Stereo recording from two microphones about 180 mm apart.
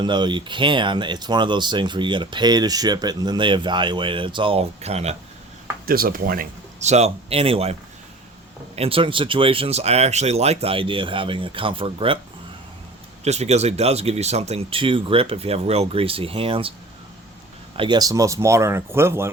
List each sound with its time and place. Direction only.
0.0 s speech: 25° right (ahead or behind)
5.8 s speech: 55° right (ahead or behind); by 12.2 s 30° right (ahead or behind)
13.2 s speech: 40° right (ahead or behind)
17.7 s speech: 25° right (ahead or behind)